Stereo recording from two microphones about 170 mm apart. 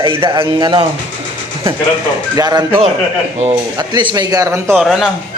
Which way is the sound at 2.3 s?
25° right (ahead or behind).